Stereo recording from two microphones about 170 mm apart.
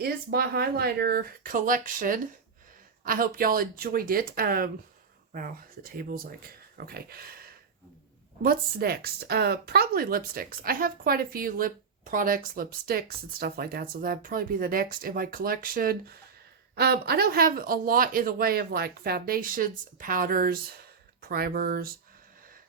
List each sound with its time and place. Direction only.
0.0 s a woman's voice: 65° right (ahead or behind)